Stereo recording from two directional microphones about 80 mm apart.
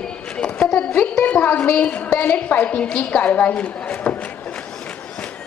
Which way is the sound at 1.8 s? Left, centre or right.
Centre.